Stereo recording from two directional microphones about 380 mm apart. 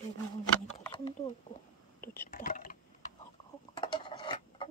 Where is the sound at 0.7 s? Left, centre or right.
Centre.